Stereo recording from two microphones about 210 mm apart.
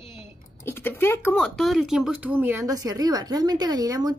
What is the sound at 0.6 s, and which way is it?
A woman's voice, 10° left (ahead or behind).